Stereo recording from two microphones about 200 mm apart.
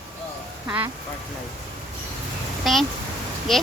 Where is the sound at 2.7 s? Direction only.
Centre (ahead or behind).